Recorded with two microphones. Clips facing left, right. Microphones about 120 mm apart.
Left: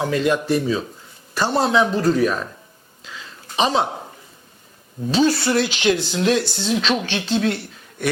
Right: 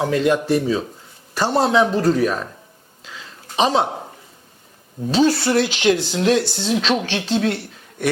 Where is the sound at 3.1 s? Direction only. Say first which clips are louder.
Even; 40° right (ahead or behind).